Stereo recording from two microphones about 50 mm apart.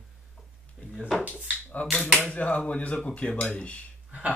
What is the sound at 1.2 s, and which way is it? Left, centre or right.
Speech, right.